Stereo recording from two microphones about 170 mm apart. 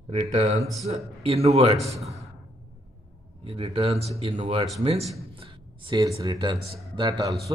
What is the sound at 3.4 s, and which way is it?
A man's voice, 35° right (ahead or behind).